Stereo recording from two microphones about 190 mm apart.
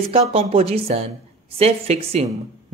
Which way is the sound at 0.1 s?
30° right (ahead or behind).